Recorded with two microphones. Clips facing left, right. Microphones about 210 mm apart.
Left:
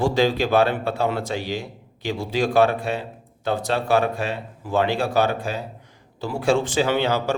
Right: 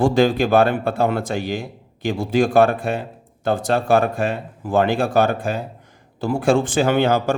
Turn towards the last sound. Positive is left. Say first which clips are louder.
# right 4 dB
turn(degrees=-50)  # may be behind; listen again after turning